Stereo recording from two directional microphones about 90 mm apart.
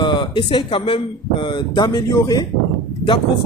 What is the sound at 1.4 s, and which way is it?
Speech, 55° left (ahead or behind).